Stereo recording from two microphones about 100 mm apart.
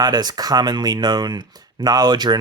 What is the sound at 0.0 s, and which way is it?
Speech, 40° right (ahead or behind).